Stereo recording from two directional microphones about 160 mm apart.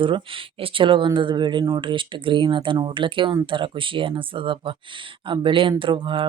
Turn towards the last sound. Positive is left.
turn(degrees=-30)  # may be behind; listen again after turning